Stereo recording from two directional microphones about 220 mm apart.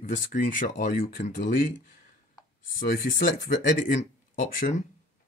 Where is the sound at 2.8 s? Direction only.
35° left (ahead or behind).